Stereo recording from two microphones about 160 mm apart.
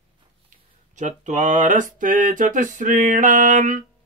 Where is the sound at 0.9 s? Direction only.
50° right (ahead or behind).